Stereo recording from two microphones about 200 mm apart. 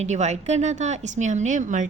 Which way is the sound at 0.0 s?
35° right (ahead or behind).